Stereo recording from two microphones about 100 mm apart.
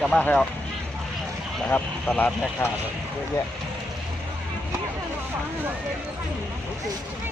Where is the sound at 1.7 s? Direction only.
15° left (ahead or behind).